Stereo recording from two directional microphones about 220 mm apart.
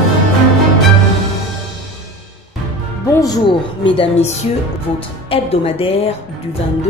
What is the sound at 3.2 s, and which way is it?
Speech, 20° left (ahead or behind).